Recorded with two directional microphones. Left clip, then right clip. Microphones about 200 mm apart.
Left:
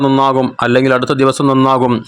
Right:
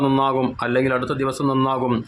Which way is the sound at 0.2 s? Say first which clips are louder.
Left 8 dB; 30° left (ahead or behind).